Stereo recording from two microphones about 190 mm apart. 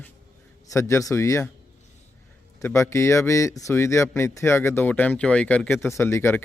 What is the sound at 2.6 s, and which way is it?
Speech, 15° left (ahead or behind).